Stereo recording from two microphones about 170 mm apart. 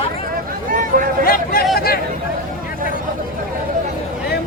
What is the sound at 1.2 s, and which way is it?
Speech, 60° left (ahead or behind).